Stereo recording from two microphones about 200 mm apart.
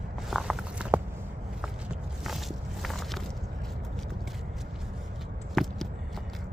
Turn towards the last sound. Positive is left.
turn(degrees=0)  # may be behind; listen again after turning